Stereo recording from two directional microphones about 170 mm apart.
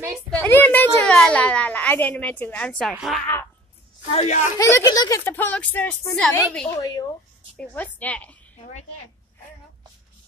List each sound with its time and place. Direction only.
0.3 s a woman's voice: 10° left (ahead or behind)
4.1 s speech: 40° left (ahead or behind)
4.6 s a woman's voice: 20° left (ahead or behind); by 6.7 s 5° left (ahead or behind)
6.8 s speech: 20° left (ahead or behind)
7.5 s a woman's voice: 10° left (ahead or behind)
8.5 s a woman's voice: 45° left (ahead or behind)